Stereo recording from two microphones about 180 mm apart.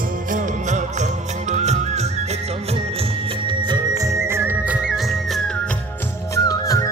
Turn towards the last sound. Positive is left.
turn(degrees=20)  # may be behind; listen again after turning